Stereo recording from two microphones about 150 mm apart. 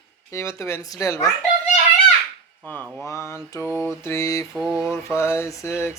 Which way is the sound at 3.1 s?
20° left (ahead or behind).